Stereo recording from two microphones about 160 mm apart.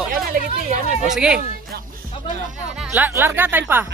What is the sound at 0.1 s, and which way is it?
Music, 60° right (ahead or behind).